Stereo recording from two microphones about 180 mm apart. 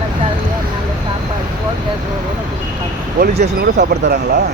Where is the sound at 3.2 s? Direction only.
65° right (ahead or behind).